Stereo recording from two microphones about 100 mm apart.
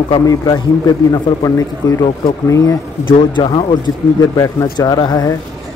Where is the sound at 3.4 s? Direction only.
50° left (ahead or behind).